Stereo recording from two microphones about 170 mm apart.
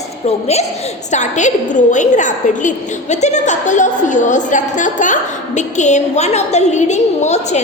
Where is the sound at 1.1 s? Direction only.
45° left (ahead or behind).